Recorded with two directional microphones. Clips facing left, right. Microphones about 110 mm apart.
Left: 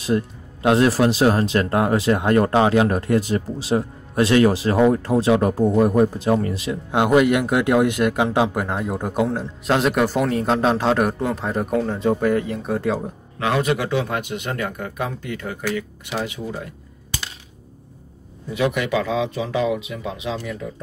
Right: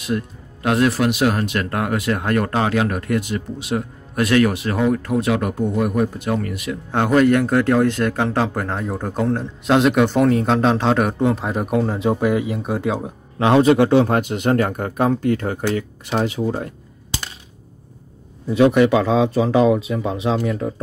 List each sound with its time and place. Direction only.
0.0 s speech: 25° left (ahead or behind)
6.9 s speech: 10° left (ahead or behind)
13.4 s speech: 30° right (ahead or behind)
16.4 s speech: 45° right (ahead or behind)
18.5 s speech: 30° right (ahead or behind)